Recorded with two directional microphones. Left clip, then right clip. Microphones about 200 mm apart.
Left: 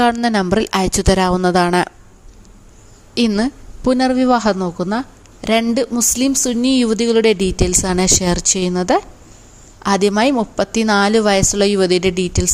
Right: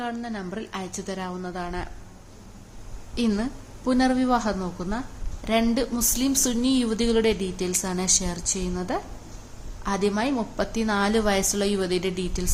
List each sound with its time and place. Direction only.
0.0 s a woman's voice: 55° left (ahead or behind)
3.2 s a woman's voice: 45° left (ahead or behind)